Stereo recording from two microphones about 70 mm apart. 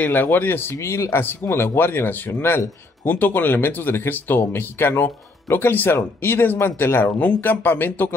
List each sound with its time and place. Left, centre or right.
0.0 s speech: left